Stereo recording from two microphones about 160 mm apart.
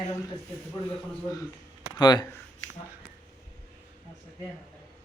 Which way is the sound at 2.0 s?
25° left (ahead or behind).